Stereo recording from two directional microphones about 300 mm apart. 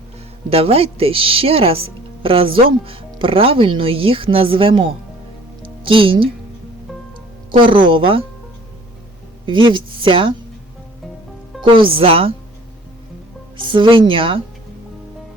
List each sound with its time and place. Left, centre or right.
0.5 s speech: centre
7.5 s speech: centre
9.5 s speech: centre
11.6 s speech: centre
13.6 s speech: centre